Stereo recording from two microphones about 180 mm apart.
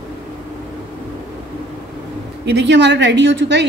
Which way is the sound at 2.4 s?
70° right (ahead or behind).